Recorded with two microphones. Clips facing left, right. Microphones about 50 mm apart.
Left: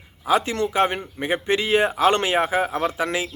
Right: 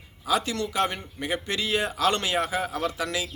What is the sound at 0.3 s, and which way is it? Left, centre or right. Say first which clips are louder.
Speech: left 5 dB; left.